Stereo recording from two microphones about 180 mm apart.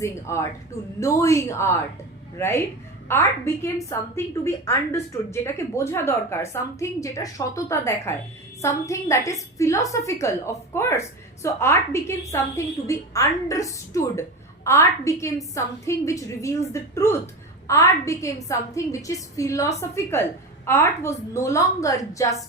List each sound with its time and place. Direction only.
0.0 s a woman's voice: 15° left (ahead or behind)